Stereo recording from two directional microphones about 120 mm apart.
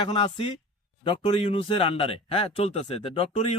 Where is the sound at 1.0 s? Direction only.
60° left (ahead or behind).